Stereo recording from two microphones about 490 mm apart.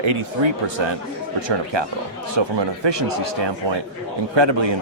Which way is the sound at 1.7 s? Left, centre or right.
Right.